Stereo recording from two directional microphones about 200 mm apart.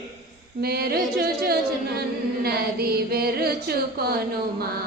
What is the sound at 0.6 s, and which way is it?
Chant, 50° right (ahead or behind).